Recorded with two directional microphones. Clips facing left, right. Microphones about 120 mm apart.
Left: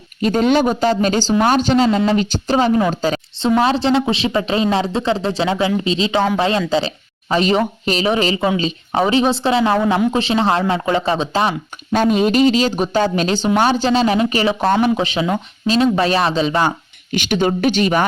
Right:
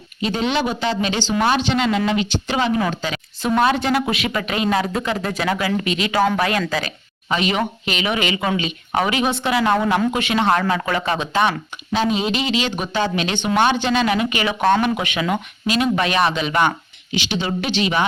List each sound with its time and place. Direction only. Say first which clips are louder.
0.2 s speech: left 6 dB; 45° left (ahead or behind); by 11.9 s 30° left (ahead or behind)
11.9 s speech: left 6 dB; 50° left (ahead or behind); by 16.7 s 30° left (ahead or behind)
17.1 s speech: left 6 dB; 50° left (ahead or behind)